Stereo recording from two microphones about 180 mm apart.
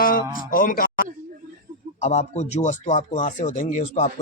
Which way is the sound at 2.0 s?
40° left (ahead or behind).